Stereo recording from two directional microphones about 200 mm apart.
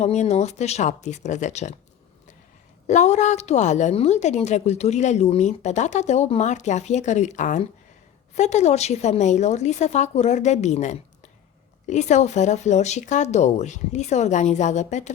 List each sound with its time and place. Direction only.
0.0 s a woman's voice: 35° left (ahead or behind)
2.8 s a woman's voice: 35° left (ahead or behind)